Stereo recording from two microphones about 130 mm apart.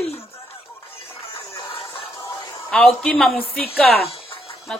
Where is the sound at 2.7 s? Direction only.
5° left (ahead or behind).